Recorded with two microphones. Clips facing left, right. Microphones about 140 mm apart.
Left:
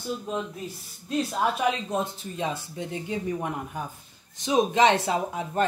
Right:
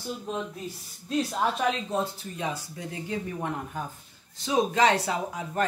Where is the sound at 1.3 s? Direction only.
10° left (ahead or behind).